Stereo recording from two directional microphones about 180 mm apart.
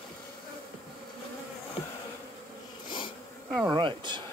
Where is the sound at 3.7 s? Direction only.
25° right (ahead or behind).